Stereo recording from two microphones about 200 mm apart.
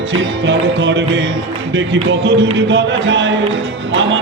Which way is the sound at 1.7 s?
60° right (ahead or behind).